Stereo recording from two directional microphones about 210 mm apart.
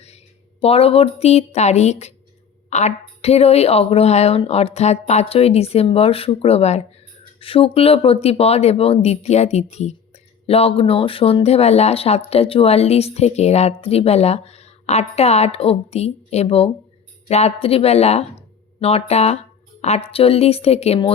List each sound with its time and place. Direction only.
0.6 s speech: 30° left (ahead or behind)